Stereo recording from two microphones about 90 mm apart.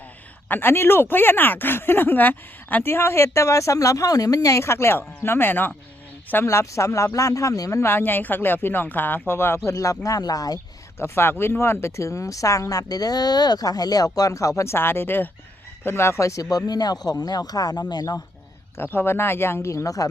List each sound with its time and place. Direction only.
0.4 s speech: 25° left (ahead or behind)
9.6 s speech: 35° left (ahead or behind)
11.0 s speech: 25° left (ahead or behind); by 18.2 s 50° left (ahead or behind)
18.8 s speech: 25° left (ahead or behind)